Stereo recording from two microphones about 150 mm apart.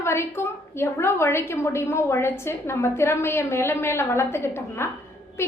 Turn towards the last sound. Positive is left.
turn(degrees=15)  # may be behind; listen again after turning